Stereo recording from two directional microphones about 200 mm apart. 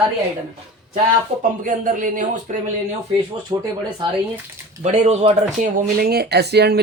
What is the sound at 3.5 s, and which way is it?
Speech, 20° right (ahead or behind).